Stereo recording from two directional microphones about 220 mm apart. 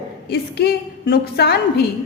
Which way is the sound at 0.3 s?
45° left (ahead or behind).